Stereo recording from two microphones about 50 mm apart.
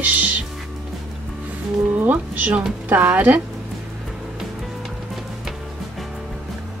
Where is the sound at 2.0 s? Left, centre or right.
Right.